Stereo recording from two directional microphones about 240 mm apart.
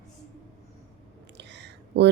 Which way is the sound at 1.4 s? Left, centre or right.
Right.